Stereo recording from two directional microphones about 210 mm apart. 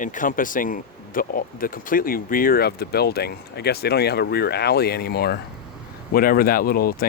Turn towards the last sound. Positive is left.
turn(degrees=45)  # may be behind; listen again after turning